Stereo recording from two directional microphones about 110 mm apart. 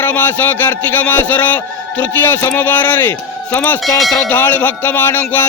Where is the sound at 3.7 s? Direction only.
Centre (ahead or behind).